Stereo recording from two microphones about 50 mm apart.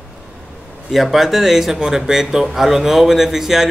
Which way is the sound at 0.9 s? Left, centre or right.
Centre.